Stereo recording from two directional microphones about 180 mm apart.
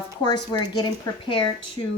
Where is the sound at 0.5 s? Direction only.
25° left (ahead or behind).